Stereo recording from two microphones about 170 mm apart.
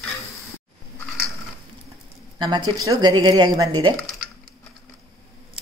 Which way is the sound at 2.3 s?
25° right (ahead or behind).